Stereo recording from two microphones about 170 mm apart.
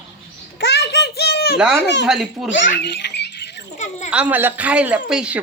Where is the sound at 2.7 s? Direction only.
90° left.